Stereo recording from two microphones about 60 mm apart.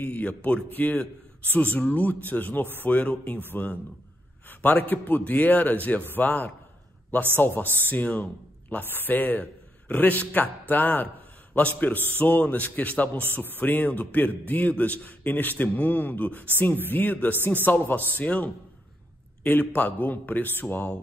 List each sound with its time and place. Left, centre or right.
0.0 s a man's voice: left
19.7 s a man's voice: left